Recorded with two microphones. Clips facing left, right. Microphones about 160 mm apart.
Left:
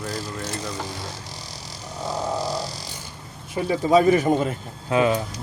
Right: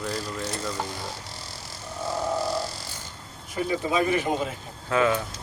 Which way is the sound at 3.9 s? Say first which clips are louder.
Left 9 dB; 40° left (ahead or behind).